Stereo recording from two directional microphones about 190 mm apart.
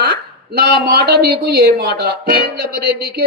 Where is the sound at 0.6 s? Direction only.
55° right (ahead or behind).